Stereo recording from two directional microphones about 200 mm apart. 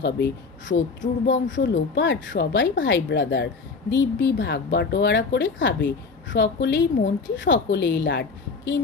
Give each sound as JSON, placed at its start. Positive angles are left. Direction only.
{"t": 0.0, "sound": "a woman's voice", "side_deg": 60}